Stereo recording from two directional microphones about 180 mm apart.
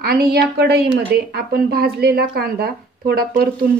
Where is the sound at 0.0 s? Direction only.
60° right (ahead or behind).